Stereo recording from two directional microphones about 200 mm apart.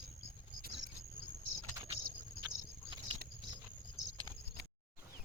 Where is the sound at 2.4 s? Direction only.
25° right (ahead or behind).